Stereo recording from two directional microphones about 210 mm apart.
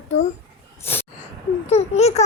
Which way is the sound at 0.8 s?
10° left (ahead or behind).